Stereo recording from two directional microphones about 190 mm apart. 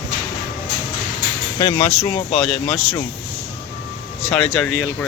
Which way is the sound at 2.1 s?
30° left (ahead or behind).